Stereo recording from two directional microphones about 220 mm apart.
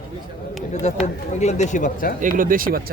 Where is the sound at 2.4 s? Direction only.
40° right (ahead or behind).